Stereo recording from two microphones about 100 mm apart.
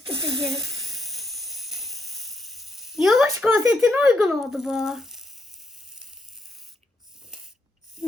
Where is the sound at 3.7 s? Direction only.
5° right (ahead or behind).